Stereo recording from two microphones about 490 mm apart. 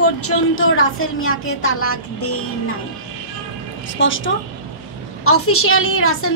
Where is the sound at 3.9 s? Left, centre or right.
Left.